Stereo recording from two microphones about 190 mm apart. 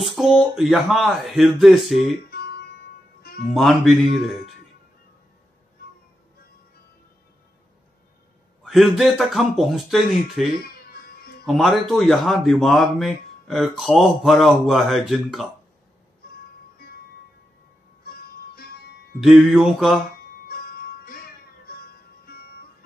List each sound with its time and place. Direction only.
0.0 s speech: centre (ahead or behind)
2.3 s music: 55° left (ahead or behind)
3.5 s speech: centre (ahead or behind)
8.6 s speech: centre (ahead or behind)
19.1 s speech: centre (ahead or behind)
20.4 s music: 55° left (ahead or behind)